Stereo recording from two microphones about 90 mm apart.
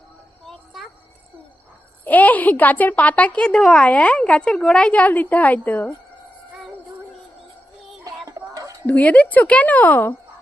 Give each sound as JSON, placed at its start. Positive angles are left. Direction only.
{"t": 0.4, "sound": "a sound", "side_deg": 0}
{"t": 2.0, "sound": "a woman's voice", "side_deg": 20}
{"t": 8.0, "sound": "music", "side_deg": -40}
{"t": 8.9, "sound": "a woman's voice", "side_deg": 15}